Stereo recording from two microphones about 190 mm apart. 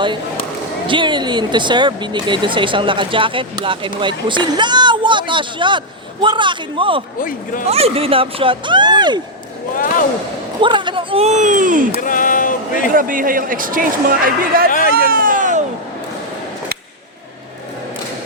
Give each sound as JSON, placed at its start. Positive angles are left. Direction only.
{"t": 0.9, "sound": "speech", "side_deg": -25}
{"t": 7.2, "sound": "speech", "side_deg": 45}
{"t": 7.7, "sound": "speech", "side_deg": -30}
{"t": 10.6, "sound": "speech", "side_deg": -25}
{"t": 11.9, "sound": "a sound", "side_deg": 45}
{"t": 12.9, "sound": "speech", "side_deg": -45}
{"t": 14.7, "sound": "speech", "side_deg": 45}
{"t": 15.1, "sound": "a sound", "side_deg": -45}